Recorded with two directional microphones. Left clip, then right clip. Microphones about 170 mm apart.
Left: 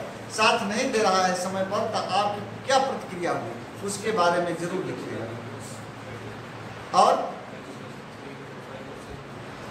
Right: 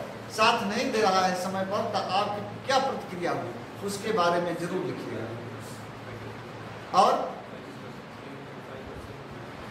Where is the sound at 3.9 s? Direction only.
Centre (ahead or behind).